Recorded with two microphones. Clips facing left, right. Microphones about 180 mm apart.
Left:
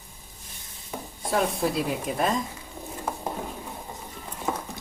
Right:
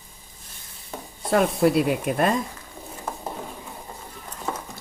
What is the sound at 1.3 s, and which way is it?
Speech, 65° right (ahead or behind).